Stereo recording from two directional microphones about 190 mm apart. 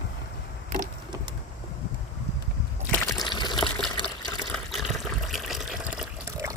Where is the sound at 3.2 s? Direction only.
25° left (ahead or behind).